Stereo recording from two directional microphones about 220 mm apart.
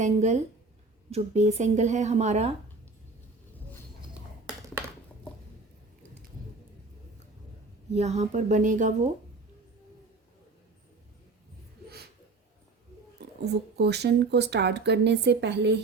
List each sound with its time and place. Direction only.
0.0 s a woman's voice: 30° right (ahead or behind)
7.9 s a woman's voice: 30° right (ahead or behind)
13.1 s speech: 50° right (ahead or behind)